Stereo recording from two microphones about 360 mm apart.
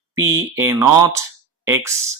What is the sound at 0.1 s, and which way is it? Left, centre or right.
Speech, centre.